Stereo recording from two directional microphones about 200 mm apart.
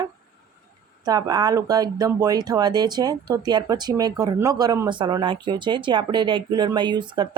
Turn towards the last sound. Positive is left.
turn(degrees=-20)  # may be behind; listen again after turning